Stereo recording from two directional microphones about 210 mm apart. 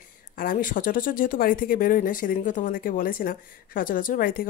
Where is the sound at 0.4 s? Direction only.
40° left (ahead or behind).